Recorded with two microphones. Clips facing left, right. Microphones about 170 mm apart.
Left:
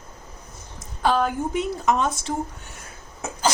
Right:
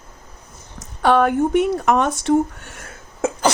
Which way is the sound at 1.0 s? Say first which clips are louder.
Right 6 dB; 65° right (ahead or behind).